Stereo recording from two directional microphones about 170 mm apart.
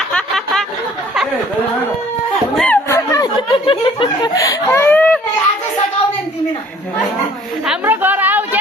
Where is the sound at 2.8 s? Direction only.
20° left (ahead or behind).